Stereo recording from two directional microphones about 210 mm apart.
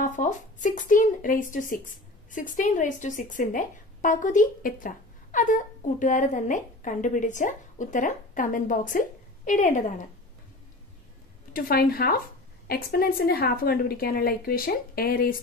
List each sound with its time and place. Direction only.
0.0 s a woman's voice: 35° left (ahead or behind)
11.5 s a woman's voice: 45° left (ahead or behind)